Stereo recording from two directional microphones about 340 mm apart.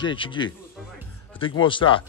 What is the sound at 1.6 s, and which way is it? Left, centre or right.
Speech, centre.